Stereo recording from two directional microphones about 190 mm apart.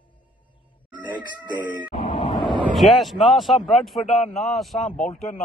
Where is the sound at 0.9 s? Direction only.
25° right (ahead or behind).